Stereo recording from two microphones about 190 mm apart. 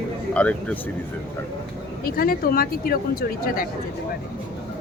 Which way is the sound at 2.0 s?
50° left (ahead or behind).